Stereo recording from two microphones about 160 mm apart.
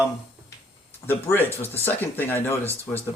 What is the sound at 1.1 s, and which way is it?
Speech, 15° left (ahead or behind).